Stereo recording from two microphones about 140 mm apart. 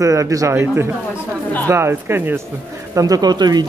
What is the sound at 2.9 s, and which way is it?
Speech, 25° right (ahead or behind).